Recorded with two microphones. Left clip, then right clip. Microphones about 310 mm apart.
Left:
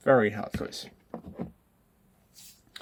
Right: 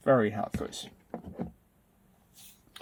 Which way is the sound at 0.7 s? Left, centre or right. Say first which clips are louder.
Left 1 dB; centre.